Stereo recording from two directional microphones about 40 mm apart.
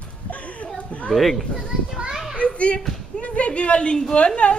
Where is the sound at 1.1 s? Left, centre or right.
Centre.